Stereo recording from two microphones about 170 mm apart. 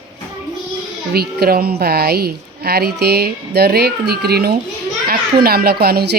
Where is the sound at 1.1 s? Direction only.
65° right (ahead or behind).